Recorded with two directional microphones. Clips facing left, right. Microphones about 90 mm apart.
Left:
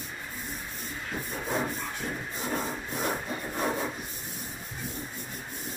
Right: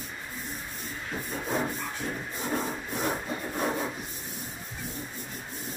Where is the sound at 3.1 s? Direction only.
5° right (ahead or behind).